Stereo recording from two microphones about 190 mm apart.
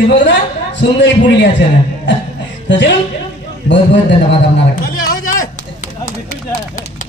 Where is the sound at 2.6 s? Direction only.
65° left (ahead or behind).